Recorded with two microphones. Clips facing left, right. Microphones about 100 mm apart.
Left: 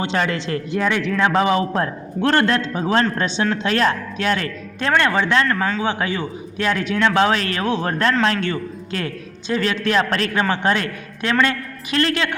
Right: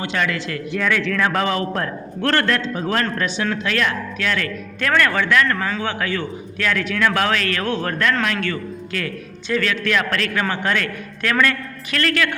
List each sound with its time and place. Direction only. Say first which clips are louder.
0.0 s a man's voice: left 2 dB; 30° left (ahead or behind)